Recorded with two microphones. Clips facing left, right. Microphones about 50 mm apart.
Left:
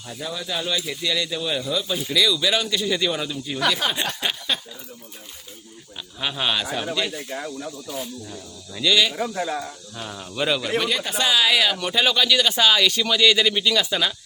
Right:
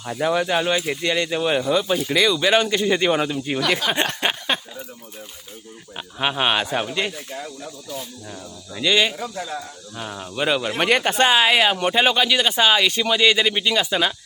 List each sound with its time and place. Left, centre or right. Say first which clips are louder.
0.2 s speech: right 9 dB; right
6.1 s speech: right 4 dB; right
8.8 s speech: right 1 dB; right
9.1 s speech: left 3 dB; left
10.0 s speech: right 2 dB; centre
10.8 s speech: right 5 dB; right